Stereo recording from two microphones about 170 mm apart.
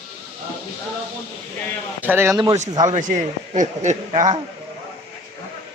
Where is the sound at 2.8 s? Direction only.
45° right (ahead or behind).